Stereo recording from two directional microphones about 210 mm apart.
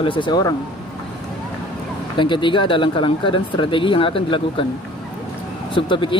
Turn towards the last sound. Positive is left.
turn(degrees=25)  # may be behind; listen again after turning